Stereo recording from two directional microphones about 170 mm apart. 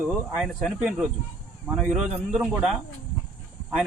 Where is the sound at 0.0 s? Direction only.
5° right (ahead or behind).